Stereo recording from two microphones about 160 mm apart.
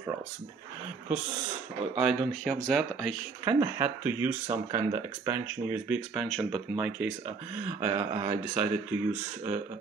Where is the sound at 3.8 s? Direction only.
10° right (ahead or behind).